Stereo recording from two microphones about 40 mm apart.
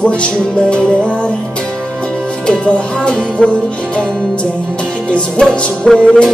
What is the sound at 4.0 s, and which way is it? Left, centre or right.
Music, centre.